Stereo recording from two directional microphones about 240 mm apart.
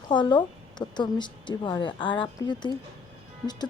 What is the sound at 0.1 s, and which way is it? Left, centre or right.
A woman's voice, centre.